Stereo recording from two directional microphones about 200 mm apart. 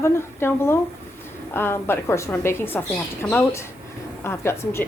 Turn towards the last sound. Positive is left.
turn(degrees=15)  # may be behind; listen again after turning